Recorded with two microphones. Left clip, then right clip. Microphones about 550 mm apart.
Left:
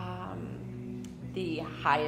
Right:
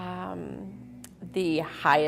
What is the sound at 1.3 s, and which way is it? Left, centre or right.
Speech, right.